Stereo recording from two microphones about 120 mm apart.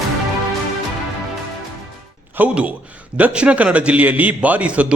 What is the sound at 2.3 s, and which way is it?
Speech, 10° right (ahead or behind).